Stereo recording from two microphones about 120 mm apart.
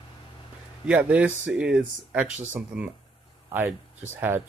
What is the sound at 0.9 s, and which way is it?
Speech, 10° right (ahead or behind).